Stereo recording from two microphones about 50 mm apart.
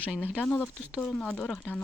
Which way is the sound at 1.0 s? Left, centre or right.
Centre.